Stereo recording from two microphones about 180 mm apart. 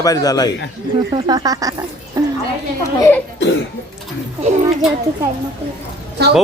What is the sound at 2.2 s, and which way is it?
Music, 20° right (ahead or behind).